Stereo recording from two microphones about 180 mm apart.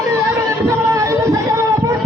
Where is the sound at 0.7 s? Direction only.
15° right (ahead or behind).